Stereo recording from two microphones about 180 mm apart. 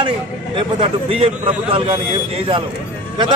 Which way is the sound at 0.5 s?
30° right (ahead or behind).